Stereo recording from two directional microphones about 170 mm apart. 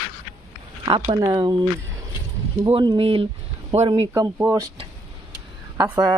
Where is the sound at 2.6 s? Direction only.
25° right (ahead or behind).